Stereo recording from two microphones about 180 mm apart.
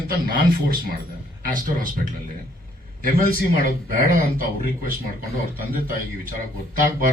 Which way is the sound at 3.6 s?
50° right (ahead or behind).